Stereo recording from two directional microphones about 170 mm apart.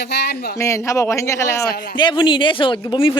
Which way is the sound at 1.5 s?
75° left (ahead or behind).